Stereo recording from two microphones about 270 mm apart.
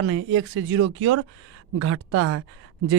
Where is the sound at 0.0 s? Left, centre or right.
Right.